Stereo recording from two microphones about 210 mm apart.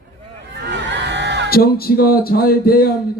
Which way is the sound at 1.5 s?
45° left (ahead or behind).